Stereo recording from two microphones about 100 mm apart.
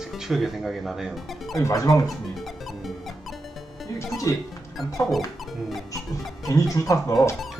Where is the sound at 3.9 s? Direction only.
30° left (ahead or behind).